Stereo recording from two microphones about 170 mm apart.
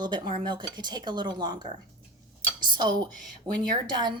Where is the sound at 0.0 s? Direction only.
25° right (ahead or behind).